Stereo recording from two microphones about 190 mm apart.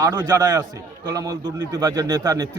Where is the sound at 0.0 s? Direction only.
15° right (ahead or behind).